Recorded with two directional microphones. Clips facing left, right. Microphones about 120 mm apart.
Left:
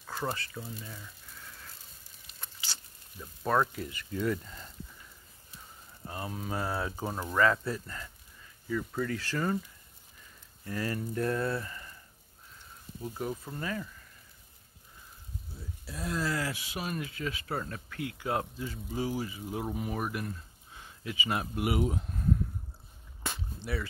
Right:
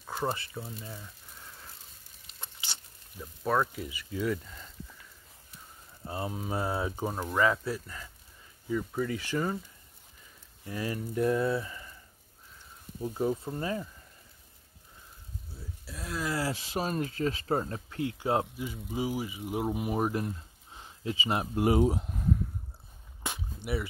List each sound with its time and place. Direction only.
0.0 s a sound: 20° right (ahead or behind)
2.2 s patter: 25° right (ahead or behind)
3.4 s speech: 5° right (ahead or behind)
6.0 s speech: 20° right (ahead or behind)
10.6 s speech: 15° right (ahead or behind)
13.0 s speech: 20° right (ahead or behind)
15.8 s speech: centre (ahead or behind)
16.3 s speech: 25° right (ahead or behind)
23.2 s whip: 15° right (ahead or behind)